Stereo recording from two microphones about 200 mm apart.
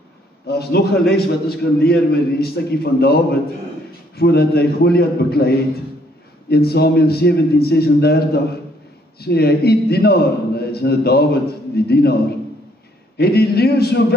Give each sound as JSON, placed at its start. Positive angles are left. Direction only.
{"t": 0.5, "sound": "a man's voice", "side_deg": 50}
{"t": 6.5, "sound": "a man's voice", "side_deg": 50}
{"t": 13.2, "sound": "a man's voice", "side_deg": 50}